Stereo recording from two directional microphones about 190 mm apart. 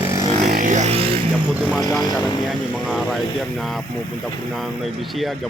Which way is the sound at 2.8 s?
Centre (ahead or behind).